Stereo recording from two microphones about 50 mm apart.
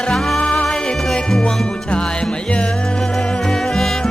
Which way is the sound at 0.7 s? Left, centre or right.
Centre.